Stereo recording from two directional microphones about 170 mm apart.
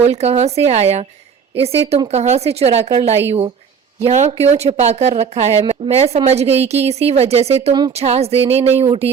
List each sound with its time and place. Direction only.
0.0 s speech: 40° right (ahead or behind)